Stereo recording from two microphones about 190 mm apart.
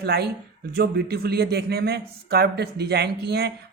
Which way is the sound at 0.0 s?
55° right (ahead or behind).